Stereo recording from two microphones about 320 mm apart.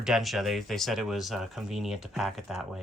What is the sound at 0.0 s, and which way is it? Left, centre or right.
Speech, centre.